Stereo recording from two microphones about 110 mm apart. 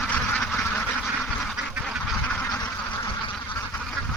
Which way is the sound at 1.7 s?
5° right (ahead or behind).